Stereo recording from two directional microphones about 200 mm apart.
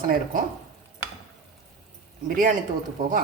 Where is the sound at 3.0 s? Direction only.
45° right (ahead or behind).